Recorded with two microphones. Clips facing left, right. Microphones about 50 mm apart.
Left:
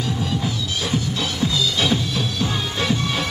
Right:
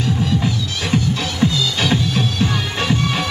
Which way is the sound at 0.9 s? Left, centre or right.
Right.